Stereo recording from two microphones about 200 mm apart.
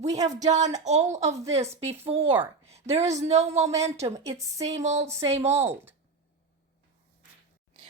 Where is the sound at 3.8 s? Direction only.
15° right (ahead or behind).